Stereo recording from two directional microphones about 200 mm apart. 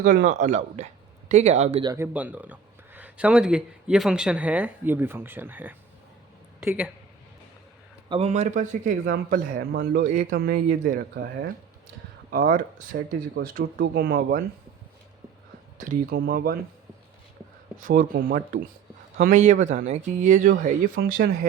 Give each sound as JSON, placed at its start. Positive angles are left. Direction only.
{"t": 0.0, "sound": "speech", "side_deg": -40}
{"t": 1.8, "sound": "speech", "side_deg": -20}
{"t": 2.1, "sound": "speech", "side_deg": -10}
{"t": 8.1, "sound": "speech", "side_deg": -35}
{"t": 12.3, "sound": "speech", "side_deg": -45}
{"t": 15.8, "sound": "speech", "side_deg": -45}
{"t": 17.7, "sound": "speech", "side_deg": -40}